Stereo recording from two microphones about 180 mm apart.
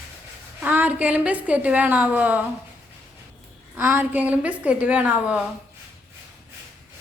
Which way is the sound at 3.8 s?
10° right (ahead or behind).